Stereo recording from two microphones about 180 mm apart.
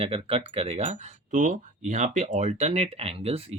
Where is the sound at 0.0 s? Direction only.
30° right (ahead or behind).